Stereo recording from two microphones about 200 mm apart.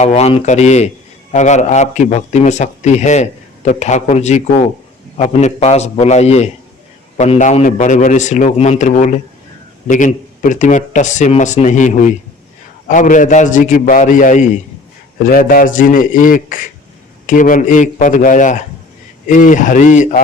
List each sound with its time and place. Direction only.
0.0 s a man's voice: 30° left (ahead or behind)